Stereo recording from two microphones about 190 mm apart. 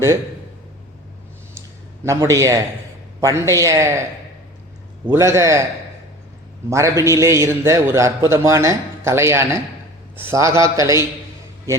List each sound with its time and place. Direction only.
2.0 s a man's voice: 15° right (ahead or behind)
5.0 s a man's voice: 15° right (ahead or behind)
6.7 s a man's voice: 15° right (ahead or behind)